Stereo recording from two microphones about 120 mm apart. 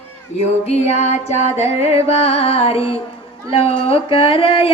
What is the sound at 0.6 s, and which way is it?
Music, 65° left (ahead or behind).